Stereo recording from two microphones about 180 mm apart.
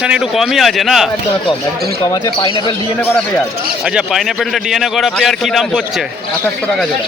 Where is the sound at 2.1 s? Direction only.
25° left (ahead or behind).